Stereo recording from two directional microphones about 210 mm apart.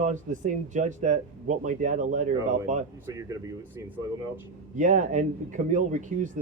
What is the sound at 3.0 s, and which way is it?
Speech, 15° right (ahead or behind).